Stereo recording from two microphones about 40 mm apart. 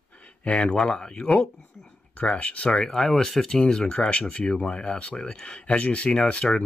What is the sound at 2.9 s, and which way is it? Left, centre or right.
Speech, centre.